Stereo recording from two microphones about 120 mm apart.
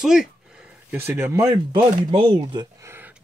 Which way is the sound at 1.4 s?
35° right (ahead or behind).